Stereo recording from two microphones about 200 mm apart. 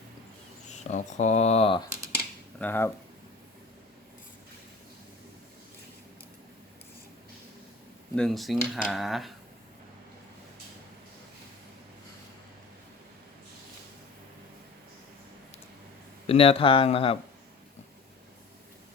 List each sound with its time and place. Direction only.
0.7 s speech: 35° left (ahead or behind)
2.6 s speech: 10° left (ahead or behind)
8.1 s speech: centre (ahead or behind)
16.2 s speech: 30° left (ahead or behind)